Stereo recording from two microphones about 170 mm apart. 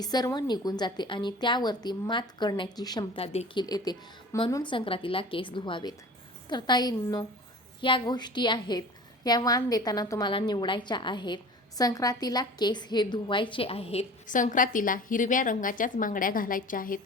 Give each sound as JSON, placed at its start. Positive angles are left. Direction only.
{"t": 0.0, "sound": "a woman's voice", "side_deg": 25}
{"t": 14.3, "sound": "a woman's voice", "side_deg": 50}